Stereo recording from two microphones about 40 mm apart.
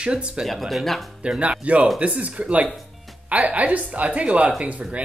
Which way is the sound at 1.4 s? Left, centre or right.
Right.